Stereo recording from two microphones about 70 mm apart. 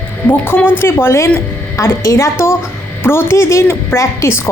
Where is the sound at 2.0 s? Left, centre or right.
Left.